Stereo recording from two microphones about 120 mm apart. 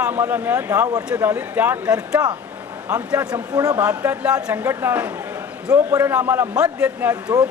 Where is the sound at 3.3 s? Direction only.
30° right (ahead or behind).